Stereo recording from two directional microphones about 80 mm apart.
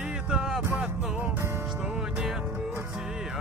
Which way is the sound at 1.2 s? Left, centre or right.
Right.